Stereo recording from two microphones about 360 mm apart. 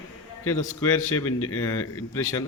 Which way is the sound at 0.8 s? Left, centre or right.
Centre.